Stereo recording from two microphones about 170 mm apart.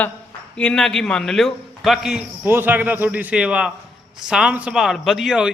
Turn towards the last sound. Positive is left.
turn(degrees=-5)  # may be behind; listen again after turning